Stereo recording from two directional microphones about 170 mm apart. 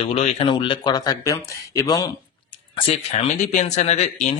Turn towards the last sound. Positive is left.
turn(degrees=40)  # may be behind; listen again after turning